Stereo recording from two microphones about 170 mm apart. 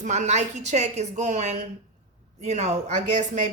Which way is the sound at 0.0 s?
45° right (ahead or behind).